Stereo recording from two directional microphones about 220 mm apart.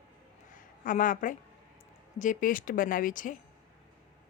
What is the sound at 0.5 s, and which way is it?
A woman's voice, 35° left (ahead or behind).